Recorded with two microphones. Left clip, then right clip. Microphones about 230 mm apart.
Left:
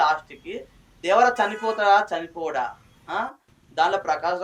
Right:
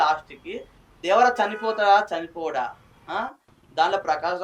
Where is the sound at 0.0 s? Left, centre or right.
Right.